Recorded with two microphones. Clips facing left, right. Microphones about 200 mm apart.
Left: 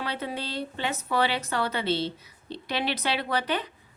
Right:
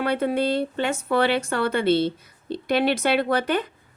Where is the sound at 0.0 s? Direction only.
55° right (ahead or behind).